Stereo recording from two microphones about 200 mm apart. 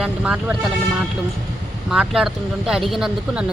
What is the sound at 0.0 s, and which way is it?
Speech, 5° right (ahead or behind).